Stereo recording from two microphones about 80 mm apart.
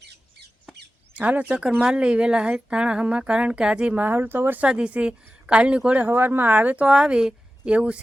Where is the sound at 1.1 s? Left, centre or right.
Centre.